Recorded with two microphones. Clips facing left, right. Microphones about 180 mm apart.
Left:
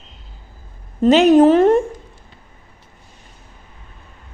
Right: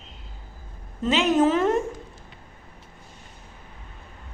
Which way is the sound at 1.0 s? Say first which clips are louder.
Left 11 dB; 70° left (ahead or behind).